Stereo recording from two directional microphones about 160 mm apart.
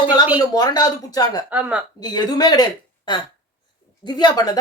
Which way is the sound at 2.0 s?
25° left (ahead or behind).